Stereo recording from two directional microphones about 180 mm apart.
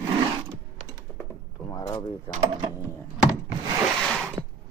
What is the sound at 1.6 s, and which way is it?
Speech, 25° left (ahead or behind).